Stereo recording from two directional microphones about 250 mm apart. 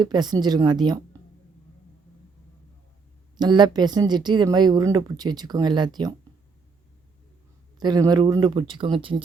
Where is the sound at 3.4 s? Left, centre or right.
Centre.